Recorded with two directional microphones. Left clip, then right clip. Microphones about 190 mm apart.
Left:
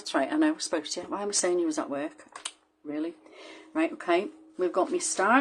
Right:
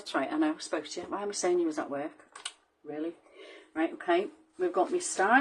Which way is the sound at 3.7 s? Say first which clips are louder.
Left 2 dB; 35° left (ahead or behind).